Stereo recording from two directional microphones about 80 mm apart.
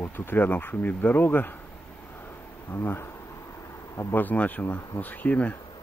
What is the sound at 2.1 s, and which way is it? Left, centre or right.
Insect, left.